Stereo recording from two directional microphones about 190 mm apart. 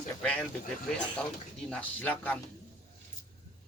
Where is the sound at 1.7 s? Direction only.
10° left (ahead or behind).